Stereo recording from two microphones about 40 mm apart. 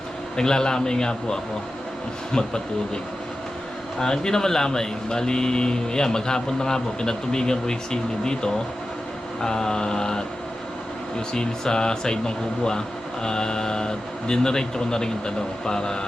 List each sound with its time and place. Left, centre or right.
0.3 s a man's voice: centre
2.3 s mantra: centre
4.0 s a man's voice: centre
9.4 s mantra: centre
11.3 s a man's voice: centre